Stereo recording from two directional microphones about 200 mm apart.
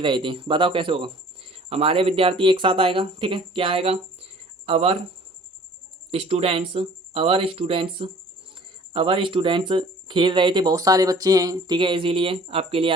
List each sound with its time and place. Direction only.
0.0 s speech: 25° right (ahead or behind)
6.1 s speech: 30° right (ahead or behind)